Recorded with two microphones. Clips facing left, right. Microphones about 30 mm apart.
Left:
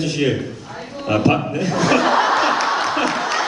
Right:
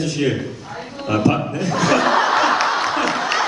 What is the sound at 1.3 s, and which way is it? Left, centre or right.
Speech, centre.